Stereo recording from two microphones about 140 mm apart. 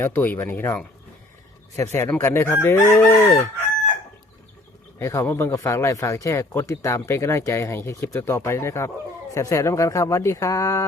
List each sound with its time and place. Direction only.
0.0 s chicken: 15° left (ahead or behind)
4.9 s speech: 20° left (ahead or behind)